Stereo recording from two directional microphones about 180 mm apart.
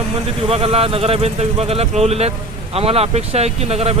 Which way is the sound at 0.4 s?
35° right (ahead or behind).